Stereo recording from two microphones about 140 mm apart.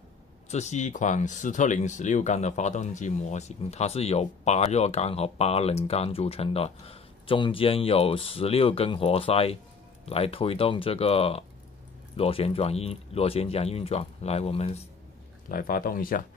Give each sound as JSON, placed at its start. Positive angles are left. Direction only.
{"t": 0.5, "sound": "speech", "side_deg": 55}
{"t": 15.4, "sound": "speech", "side_deg": 85}